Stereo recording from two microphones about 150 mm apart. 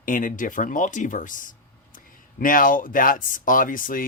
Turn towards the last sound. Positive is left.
turn(degrees=65)  # may be behind; listen again after turning